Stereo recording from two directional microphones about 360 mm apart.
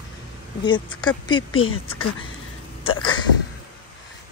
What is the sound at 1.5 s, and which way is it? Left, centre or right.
Speech, left.